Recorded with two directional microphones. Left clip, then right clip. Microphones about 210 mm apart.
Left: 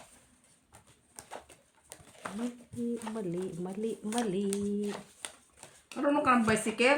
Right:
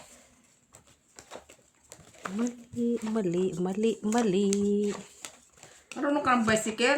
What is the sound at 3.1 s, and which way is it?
Speech, 55° right (ahead or behind).